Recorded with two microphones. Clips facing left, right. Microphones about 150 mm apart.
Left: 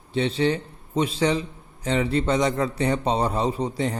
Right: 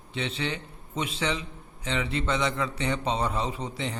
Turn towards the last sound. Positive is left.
turn(degrees=40)  # may be behind; listen again after turning